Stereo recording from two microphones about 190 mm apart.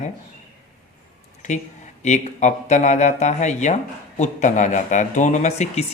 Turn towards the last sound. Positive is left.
turn(degrees=35)  # may be behind; listen again after turning